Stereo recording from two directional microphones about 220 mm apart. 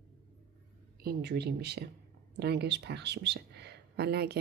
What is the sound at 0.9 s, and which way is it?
Speech, 45° right (ahead or behind).